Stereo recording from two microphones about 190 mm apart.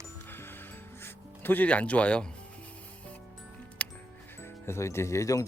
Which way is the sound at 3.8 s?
5° left (ahead or behind).